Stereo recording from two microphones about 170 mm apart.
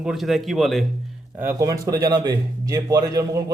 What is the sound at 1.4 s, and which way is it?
A man's voice, 15° right (ahead or behind).